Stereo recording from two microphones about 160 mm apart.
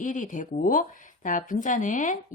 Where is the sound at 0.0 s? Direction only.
50° left (ahead or behind).